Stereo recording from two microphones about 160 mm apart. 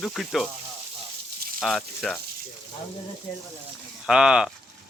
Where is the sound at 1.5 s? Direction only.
Centre (ahead or behind).